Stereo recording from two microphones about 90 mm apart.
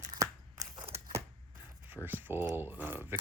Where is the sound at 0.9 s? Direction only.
30° right (ahead or behind).